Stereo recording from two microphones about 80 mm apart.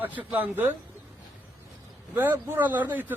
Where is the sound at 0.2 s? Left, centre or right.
Centre.